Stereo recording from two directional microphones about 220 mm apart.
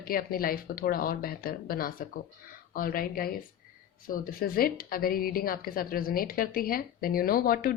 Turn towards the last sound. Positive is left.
turn(degrees=40)  # may be behind; listen again after turning